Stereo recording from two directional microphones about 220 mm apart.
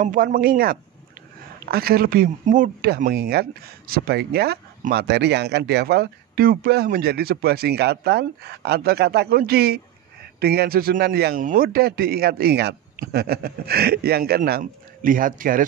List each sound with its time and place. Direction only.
0.0 s speech: 35° right (ahead or behind)